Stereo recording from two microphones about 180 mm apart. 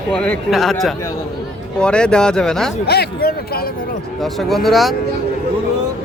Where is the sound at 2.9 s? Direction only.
65° left (ahead or behind).